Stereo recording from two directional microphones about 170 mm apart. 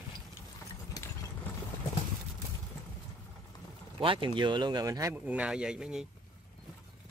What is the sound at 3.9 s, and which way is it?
Speech, 30° right (ahead or behind).